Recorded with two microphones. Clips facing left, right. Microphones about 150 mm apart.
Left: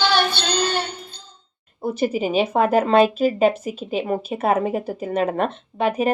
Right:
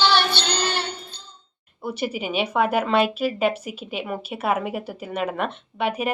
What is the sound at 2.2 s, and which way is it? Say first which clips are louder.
Speech: left 2 dB; 40° left (ahead or behind).